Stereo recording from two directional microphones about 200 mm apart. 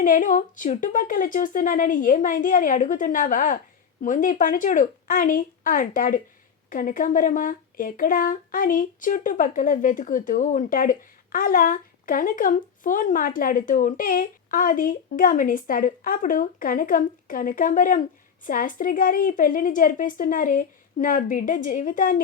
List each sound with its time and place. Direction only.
0.0 s a woman's voice: 40° left (ahead or behind)